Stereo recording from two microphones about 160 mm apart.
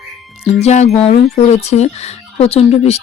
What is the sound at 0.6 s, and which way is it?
A woman's voice, 45° left (ahead or behind).